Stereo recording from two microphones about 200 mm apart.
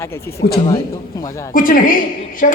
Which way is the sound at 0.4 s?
50° left (ahead or behind).